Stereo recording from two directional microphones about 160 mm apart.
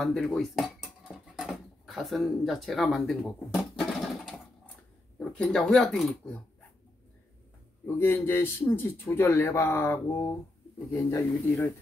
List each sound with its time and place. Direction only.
0.0 s dishes: centre (ahead or behind)
5.4 s speech: 5° left (ahead or behind)
7.8 s speech: 15° left (ahead or behind)